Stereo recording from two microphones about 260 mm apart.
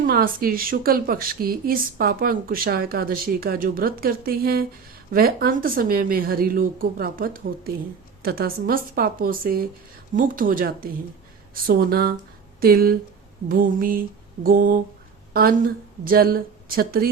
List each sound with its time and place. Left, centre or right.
0.0 s a woman's voice: right